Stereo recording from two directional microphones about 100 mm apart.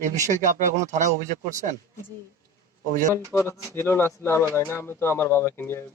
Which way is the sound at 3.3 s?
20° left (ahead or behind).